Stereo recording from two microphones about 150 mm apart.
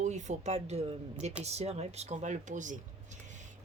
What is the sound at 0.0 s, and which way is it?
Speech, 50° right (ahead or behind).